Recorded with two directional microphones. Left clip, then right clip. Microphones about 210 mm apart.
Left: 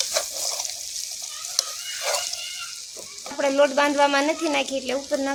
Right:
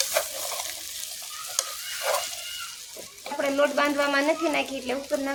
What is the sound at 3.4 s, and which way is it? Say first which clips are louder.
Speech: left 4 dB; 35° left (ahead or behind).